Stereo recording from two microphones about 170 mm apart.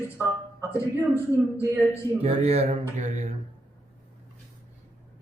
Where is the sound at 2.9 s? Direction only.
45° right (ahead or behind).